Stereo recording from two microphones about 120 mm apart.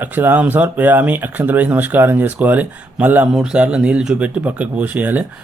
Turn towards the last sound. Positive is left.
turn(degrees=-15)  # may be behind; listen again after turning